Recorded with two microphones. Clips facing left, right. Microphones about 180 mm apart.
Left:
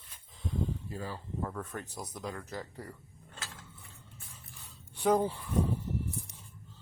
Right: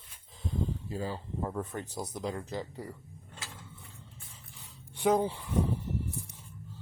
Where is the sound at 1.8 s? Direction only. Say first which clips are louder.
Right 5 dB; 40° right (ahead or behind).